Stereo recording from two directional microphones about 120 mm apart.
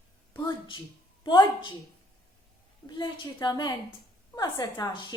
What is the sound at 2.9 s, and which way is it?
A woman's voice, 40° left (ahead or behind).